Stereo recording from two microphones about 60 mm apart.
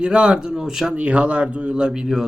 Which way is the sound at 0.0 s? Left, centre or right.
Centre.